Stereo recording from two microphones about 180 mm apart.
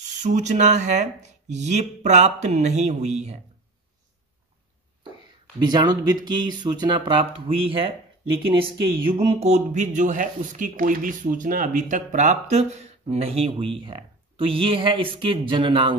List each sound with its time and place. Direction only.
0.0 s speech: 40° right (ahead or behind)
5.6 s speech: 25° right (ahead or behind)
9.1 s speech: 35° right (ahead or behind)